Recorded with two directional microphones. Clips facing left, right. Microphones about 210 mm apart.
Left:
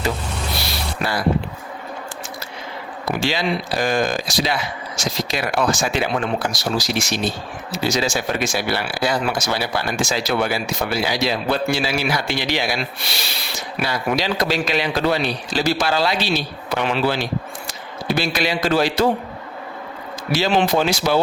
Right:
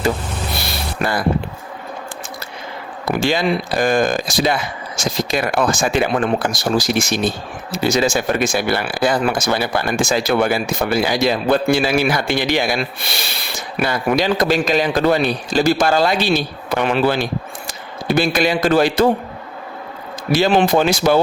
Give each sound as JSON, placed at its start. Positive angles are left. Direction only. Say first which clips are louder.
{"t": 0.6, "sound": "music", "louder": "right 3 dB", "side_deg": -50}
{"t": 3.1, "sound": "a man's voice", "louder": "right 4 dB", "side_deg": -50}
{"t": 20.3, "sound": "speech", "louder": "right 4 dB", "side_deg": -50}